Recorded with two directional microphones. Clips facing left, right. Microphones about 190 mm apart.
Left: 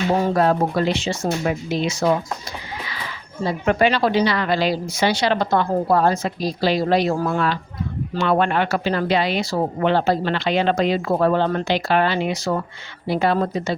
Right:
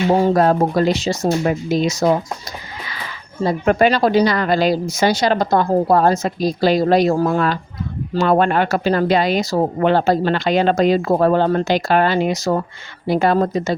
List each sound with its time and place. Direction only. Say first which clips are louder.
0.1 s speech: right 4 dB; 35° right (ahead or behind)
3.4 s speech: right 3 dB; 45° right (ahead or behind)